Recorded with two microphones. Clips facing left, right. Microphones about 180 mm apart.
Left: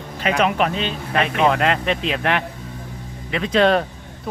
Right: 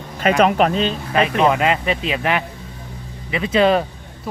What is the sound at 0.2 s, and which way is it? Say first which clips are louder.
Speech: right 4 dB; 40° right (ahead or behind).